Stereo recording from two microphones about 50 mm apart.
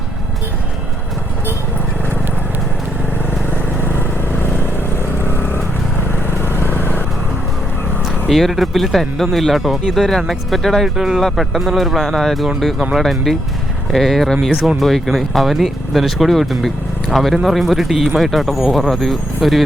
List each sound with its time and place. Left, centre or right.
5.2 s vehicle: left
8.3 s speech: centre
10.8 s speech: centre
11.2 s speech: centre